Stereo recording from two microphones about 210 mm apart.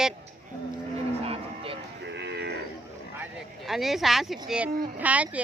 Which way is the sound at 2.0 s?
55° right (ahead or behind).